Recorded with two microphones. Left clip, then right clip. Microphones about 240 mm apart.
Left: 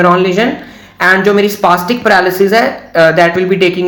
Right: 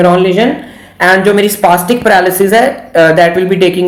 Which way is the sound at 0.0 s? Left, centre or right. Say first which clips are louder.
Right 1 dB; centre.